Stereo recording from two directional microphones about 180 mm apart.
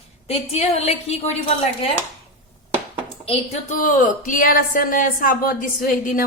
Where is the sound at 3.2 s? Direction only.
35° left (ahead or behind).